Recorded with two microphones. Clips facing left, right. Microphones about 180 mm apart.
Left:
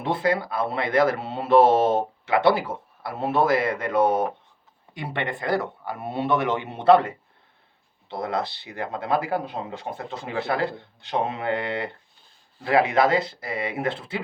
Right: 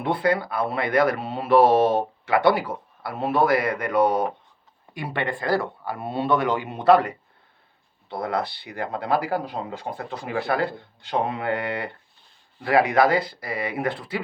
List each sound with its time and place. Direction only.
0.0 s speech: 25° left (ahead or behind)